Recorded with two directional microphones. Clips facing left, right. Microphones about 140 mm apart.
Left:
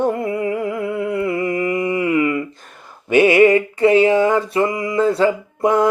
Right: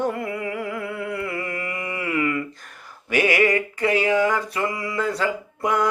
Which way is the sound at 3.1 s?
25° left (ahead or behind).